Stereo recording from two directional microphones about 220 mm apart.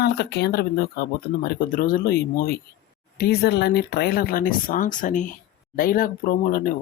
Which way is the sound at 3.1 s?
50° left (ahead or behind).